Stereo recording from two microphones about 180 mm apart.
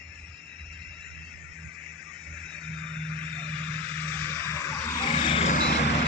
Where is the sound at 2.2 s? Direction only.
5° left (ahead or behind).